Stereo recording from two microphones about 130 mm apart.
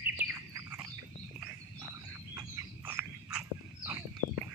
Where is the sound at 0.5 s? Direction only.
25° right (ahead or behind).